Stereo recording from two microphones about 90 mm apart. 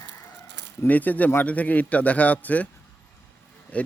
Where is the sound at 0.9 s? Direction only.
20° left (ahead or behind).